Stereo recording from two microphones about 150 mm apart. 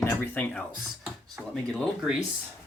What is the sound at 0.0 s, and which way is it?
Speech, 15° left (ahead or behind).